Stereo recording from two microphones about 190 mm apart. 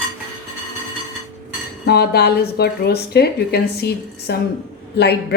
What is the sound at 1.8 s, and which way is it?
A woman's voice, 55° left (ahead or behind).